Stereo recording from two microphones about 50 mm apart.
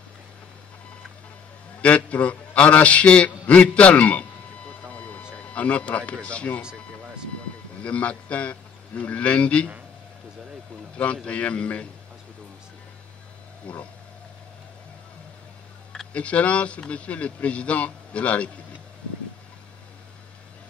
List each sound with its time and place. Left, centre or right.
1.8 s a man's voice: left
4.8 s a sound: left
5.3 s a man's voice: left
7.8 s a man's voice: left
11.2 s a man's voice: left
13.7 s a man's voice: left
16.1 s a man's voice: left